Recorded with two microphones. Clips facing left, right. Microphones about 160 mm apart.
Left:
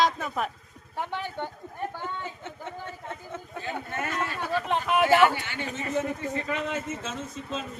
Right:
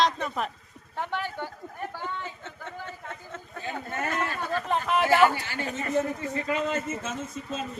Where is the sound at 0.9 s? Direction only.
15° left (ahead or behind).